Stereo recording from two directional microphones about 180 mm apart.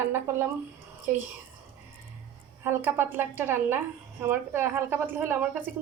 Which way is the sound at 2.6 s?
10° right (ahead or behind).